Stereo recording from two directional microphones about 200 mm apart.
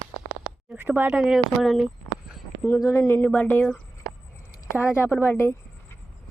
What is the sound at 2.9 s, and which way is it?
Speech, 15° left (ahead or behind).